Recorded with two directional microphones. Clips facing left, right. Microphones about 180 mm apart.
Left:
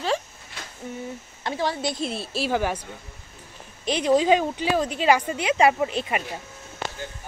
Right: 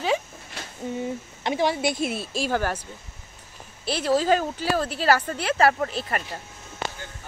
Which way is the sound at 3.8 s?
5° right (ahead or behind).